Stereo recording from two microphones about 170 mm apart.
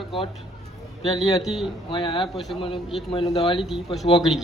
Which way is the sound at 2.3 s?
Centre (ahead or behind).